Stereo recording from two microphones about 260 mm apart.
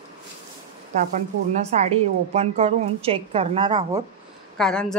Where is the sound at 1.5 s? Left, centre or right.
Right.